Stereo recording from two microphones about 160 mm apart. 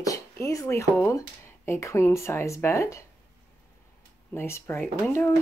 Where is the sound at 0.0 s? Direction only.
20° left (ahead or behind).